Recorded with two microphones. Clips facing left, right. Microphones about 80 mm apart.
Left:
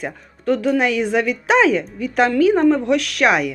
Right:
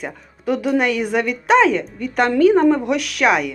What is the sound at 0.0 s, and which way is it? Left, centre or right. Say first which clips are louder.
Speech: left 1 dB; centre.